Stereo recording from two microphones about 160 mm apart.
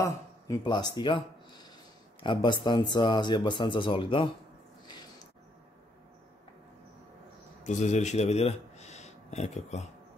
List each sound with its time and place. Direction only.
0.0 s speech: 25° left (ahead or behind)
7.6 s a man's voice: 50° left (ahead or behind)